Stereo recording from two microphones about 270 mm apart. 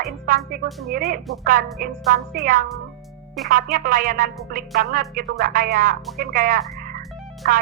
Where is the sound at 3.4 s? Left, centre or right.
Right.